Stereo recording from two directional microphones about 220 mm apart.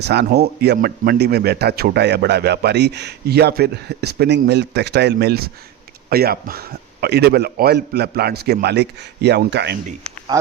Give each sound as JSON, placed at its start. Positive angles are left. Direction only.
{"t": 0.0, "sound": "speech", "side_deg": -50}